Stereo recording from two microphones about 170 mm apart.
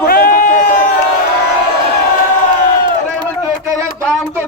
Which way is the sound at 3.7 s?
5° left (ahead or behind).